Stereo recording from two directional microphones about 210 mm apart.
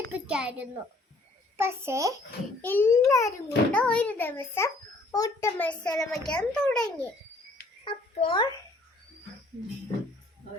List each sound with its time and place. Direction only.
0.1 s a child's voice: 5° right (ahead or behind)
2.6 s a child's voice: 10° left (ahead or behind)
7.9 s a child's voice: 25° left (ahead or behind)